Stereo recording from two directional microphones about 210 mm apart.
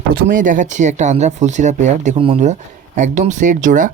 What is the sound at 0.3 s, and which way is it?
Speech, 40° right (ahead or behind).